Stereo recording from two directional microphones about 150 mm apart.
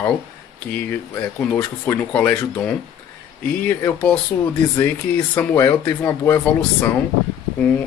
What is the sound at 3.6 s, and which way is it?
Speech, 10° left (ahead or behind).